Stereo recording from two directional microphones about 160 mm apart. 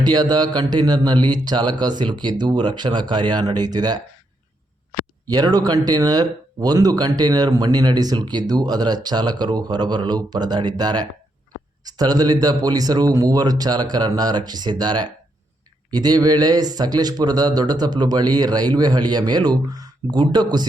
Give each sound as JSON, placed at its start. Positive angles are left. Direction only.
{"t": 0.0, "sound": "speech", "side_deg": -25}
{"t": 5.3, "sound": "speech", "side_deg": -25}